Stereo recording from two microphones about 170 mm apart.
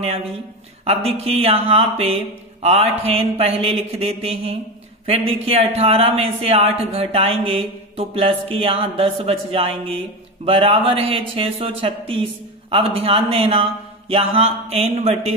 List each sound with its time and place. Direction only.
0.8 s speech: 35° right (ahead or behind)